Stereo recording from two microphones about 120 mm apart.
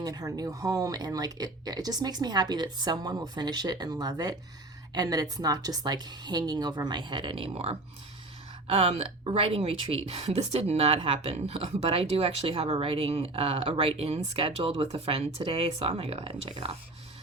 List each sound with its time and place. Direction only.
0.0 s speech: 30° right (ahead or behind)